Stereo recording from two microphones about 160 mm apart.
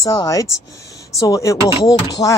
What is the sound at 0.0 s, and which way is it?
Speech, 20° left (ahead or behind).